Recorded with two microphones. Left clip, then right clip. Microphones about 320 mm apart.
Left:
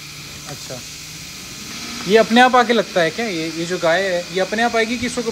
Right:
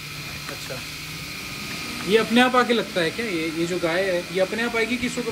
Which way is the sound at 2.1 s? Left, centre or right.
Centre.